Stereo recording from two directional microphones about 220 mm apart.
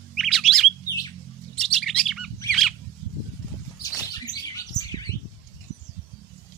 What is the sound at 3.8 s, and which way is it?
Bird, 15° left (ahead or behind).